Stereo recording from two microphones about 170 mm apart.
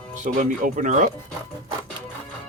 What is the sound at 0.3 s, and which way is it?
Speech, 50° right (ahead or behind).